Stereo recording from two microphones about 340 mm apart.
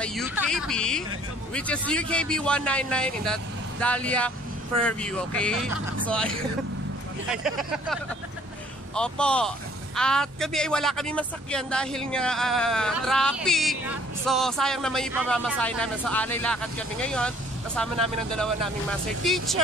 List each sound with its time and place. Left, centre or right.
0.0 s speech: centre
7.4 s speech: centre
19.2 s speech: centre